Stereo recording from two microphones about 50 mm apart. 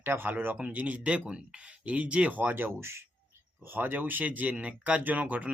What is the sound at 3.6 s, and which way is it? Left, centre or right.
Speech, right.